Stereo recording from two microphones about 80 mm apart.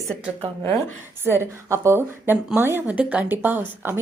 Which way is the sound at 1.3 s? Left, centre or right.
Right.